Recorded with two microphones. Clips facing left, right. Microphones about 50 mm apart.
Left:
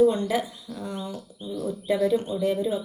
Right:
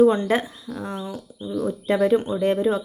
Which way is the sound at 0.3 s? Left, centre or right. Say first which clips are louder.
Right 4 dB; right.